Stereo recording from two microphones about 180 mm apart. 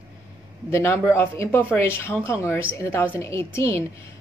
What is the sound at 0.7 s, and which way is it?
A woman's voice, 15° left (ahead or behind).